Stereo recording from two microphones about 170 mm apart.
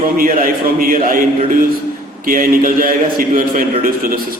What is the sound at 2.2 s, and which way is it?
A man's voice, 55° right (ahead or behind).